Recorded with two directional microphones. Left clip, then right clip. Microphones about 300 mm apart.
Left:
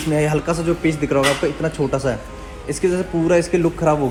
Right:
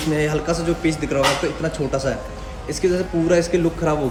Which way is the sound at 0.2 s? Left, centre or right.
Centre.